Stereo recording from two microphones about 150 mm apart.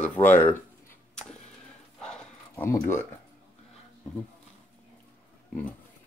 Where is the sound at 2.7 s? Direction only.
15° left (ahead or behind).